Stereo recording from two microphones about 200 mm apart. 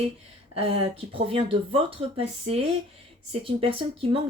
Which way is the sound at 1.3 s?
30° right (ahead or behind).